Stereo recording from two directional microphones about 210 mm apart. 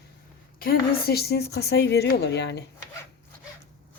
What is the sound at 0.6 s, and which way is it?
A woman's voice, 45° left (ahead or behind).